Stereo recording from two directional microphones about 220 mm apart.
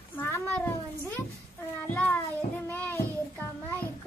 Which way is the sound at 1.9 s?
10° left (ahead or behind).